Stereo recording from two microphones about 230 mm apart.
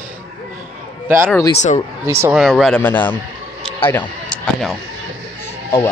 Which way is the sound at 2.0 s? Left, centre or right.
Centre.